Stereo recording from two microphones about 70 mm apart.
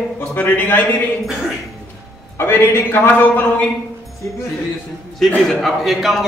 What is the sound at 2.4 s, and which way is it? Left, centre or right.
Speech, left.